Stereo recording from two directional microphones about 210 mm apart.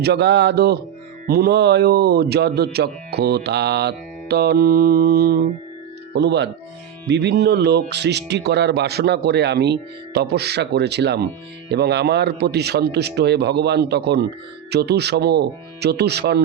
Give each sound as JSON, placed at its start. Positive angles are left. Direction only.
{"t": 0.0, "sound": "speech", "side_deg": -55}